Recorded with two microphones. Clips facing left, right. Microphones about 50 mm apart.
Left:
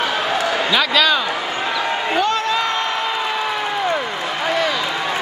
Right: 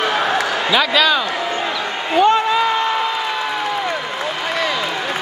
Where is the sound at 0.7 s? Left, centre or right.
Centre.